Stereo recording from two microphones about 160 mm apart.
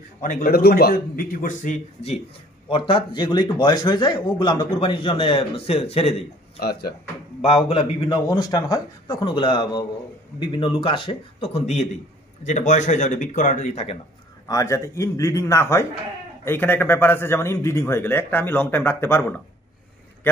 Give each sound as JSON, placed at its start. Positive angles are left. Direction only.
{"t": 0.2, "sound": "a man's voice", "side_deg": 60}
{"t": 2.7, "sound": "speech", "side_deg": 30}
{"t": 6.6, "sound": "speech", "side_deg": 75}
{"t": 7.4, "sound": "a man's voice", "side_deg": 35}
{"t": 14.5, "sound": "a man's voice", "side_deg": 20}